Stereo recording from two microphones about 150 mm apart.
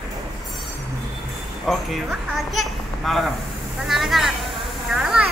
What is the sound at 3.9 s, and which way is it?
Speech, centre (ahead or behind).